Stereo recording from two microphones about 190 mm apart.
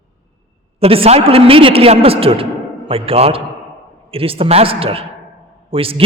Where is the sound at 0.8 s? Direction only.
30° right (ahead or behind).